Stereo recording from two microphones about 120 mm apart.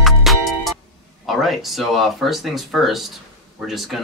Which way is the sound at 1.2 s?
Centre (ahead or behind).